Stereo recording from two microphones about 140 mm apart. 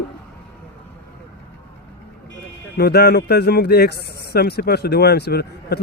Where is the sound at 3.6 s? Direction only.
90° left.